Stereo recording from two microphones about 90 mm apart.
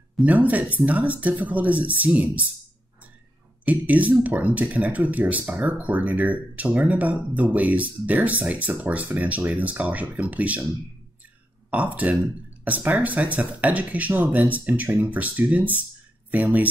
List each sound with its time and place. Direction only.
0.2 s speech: 15° right (ahead or behind)
3.6 s speech: 15° right (ahead or behind)
11.7 s speech: 15° right (ahead or behind)